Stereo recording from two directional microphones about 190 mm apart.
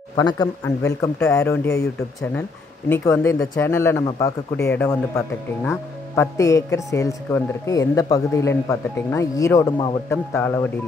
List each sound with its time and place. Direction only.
0.1 s speech: 20° left (ahead or behind)
2.9 s speech: 10° left (ahead or behind)